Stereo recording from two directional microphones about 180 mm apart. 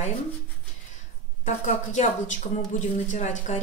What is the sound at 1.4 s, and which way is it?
A woman's voice, 40° left (ahead or behind).